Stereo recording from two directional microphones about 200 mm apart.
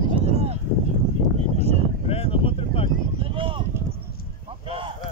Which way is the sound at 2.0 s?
30° left (ahead or behind).